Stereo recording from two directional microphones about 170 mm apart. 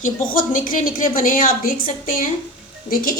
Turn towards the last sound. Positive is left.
turn(degrees=55)  # may be behind; listen again after turning